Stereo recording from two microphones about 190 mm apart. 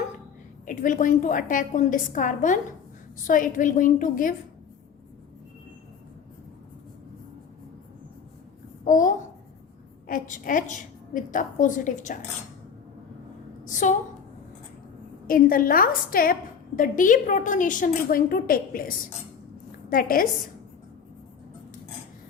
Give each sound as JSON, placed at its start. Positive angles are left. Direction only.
{"t": 0.6, "sound": "a woman's voice", "side_deg": 45}
{"t": 8.8, "sound": "babbling", "side_deg": 45}
{"t": 10.1, "sound": "a woman's voice", "side_deg": 45}
{"t": 13.7, "sound": "a sound", "side_deg": 40}
{"t": 15.3, "sound": "a woman's voice", "side_deg": 45}